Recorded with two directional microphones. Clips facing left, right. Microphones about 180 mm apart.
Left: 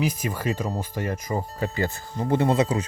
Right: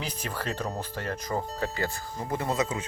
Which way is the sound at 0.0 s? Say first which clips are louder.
Left 8 dB; 10° left (ahead or behind).